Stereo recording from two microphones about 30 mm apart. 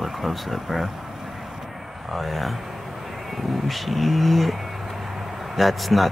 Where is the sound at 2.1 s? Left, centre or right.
Centre.